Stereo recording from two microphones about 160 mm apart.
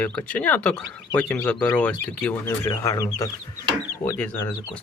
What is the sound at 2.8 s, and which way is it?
Speech, 20° left (ahead or behind).